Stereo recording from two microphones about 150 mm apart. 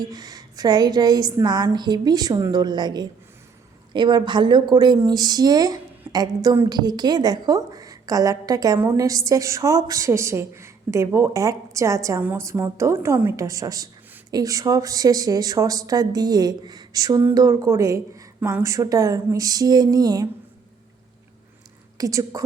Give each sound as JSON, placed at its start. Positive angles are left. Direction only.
{"t": 0.1, "sound": "a woman's voice", "side_deg": -25}
{"t": 21.9, "sound": "a woman's voice", "side_deg": -25}